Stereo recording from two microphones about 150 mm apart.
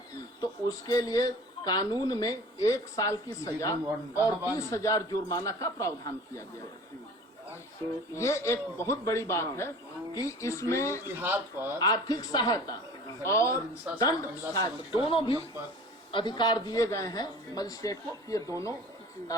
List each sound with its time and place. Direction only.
0.4 s speech: 25° left (ahead or behind)
8.1 s speech: 20° left (ahead or behind)
11.2 s speech: 15° right (ahead or behind)
11.8 s speech: 25° left (ahead or behind)
15.0 s speech: 35° left (ahead or behind)